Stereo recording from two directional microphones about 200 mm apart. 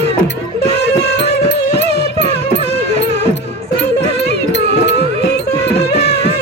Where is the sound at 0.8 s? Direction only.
55° left (ahead or behind).